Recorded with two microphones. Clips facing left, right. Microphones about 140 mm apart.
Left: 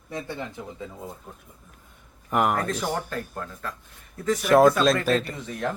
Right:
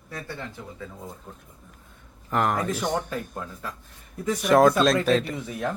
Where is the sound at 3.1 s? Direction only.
5° right (ahead or behind).